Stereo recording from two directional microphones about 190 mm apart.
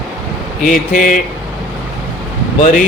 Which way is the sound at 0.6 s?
45° left (ahead or behind).